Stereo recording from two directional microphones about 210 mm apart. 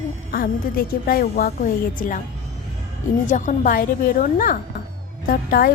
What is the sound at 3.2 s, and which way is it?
A woman's voice, 35° left (ahead or behind).